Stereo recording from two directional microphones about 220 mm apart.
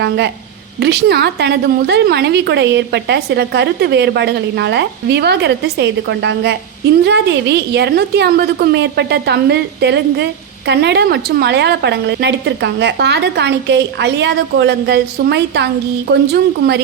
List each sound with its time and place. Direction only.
0.8 s a woman's voice: 50° right (ahead or behind)